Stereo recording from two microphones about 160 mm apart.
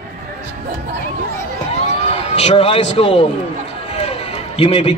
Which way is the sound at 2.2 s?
40° left (ahead or behind).